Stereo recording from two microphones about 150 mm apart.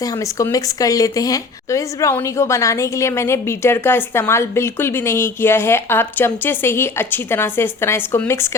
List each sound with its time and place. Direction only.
0.0 s speech: 20° left (ahead or behind)